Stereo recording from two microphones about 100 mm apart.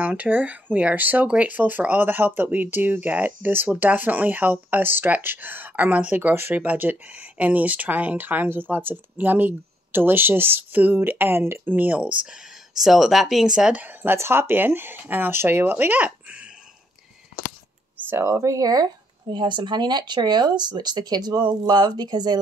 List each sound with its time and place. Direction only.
0.0 s speech: 15° right (ahead or behind)
12.7 s speech: 5° right (ahead or behind)
13.8 s speech: 25° right (ahead or behind)
18.1 s speech: 30° right (ahead or behind)
19.3 s speech: 50° right (ahead or behind)